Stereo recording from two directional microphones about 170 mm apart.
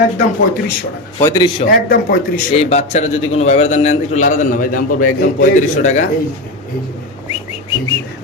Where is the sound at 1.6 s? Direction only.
60° left (ahead or behind).